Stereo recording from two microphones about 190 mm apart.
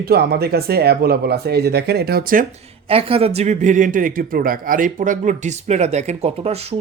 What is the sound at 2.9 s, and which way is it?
Speech, 30° right (ahead or behind).